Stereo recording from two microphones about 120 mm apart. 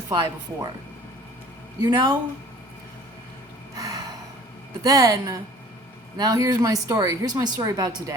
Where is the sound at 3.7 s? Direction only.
30° right (ahead or behind).